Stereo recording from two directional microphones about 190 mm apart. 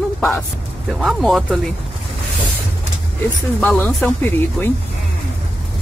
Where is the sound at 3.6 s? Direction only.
5° left (ahead or behind).